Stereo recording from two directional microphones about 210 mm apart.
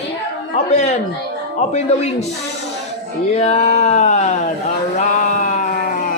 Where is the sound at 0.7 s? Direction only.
35° left (ahead or behind).